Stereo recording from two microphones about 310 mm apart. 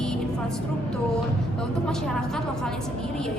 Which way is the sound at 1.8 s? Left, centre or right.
Centre.